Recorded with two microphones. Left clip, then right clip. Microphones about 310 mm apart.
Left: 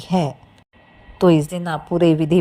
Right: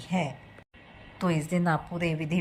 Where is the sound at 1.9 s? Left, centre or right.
Left.